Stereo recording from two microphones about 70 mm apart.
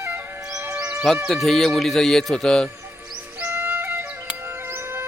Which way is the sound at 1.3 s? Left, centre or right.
Centre.